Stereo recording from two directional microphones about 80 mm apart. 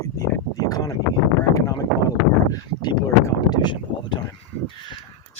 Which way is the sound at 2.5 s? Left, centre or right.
Left.